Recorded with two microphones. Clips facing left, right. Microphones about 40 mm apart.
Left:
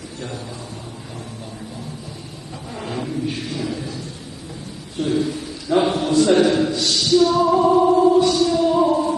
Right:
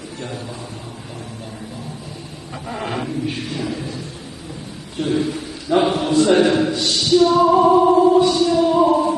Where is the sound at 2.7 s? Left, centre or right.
Right.